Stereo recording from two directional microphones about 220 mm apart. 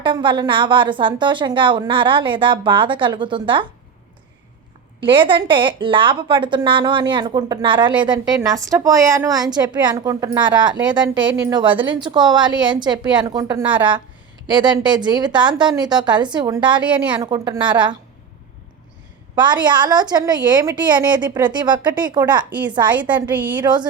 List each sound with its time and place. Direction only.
0.0 s a woman's voice: 20° right (ahead or behind)
4.9 s a woman's voice: 20° right (ahead or behind)
11.1 s a woman's voice: 60° right (ahead or behind)
11.4 s a woman's voice: 20° right (ahead or behind)
19.6 s a woman's voice: 20° right (ahead or behind)
23.0 s a woman's voice: 5° right (ahead or behind)
23.6 s a woman's voice: 20° right (ahead or behind)